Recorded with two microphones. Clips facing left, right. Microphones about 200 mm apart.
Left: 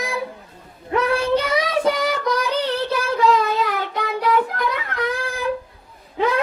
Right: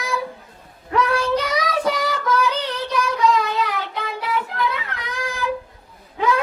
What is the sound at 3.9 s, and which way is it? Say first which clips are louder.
Child singing: left 5 dB; 45° left (ahead or behind).